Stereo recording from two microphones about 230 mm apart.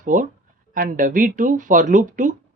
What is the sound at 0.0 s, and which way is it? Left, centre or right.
Speech, right.